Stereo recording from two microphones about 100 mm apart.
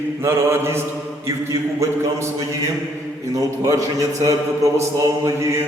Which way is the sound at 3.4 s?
35° right (ahead or behind).